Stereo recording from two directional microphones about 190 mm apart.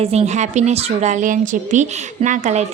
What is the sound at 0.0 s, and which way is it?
Speech, 35° right (ahead or behind).